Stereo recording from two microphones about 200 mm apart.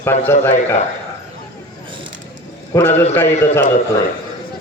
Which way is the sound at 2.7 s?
15° left (ahead or behind).